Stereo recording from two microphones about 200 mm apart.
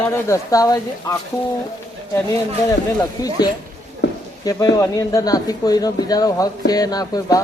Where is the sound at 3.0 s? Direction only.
20° left (ahead or behind).